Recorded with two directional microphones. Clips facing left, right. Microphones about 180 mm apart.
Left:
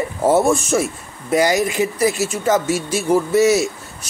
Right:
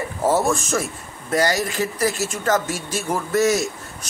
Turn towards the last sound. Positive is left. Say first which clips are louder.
# left 5 dB
turn(degrees=10)  # may be behind; listen again after turning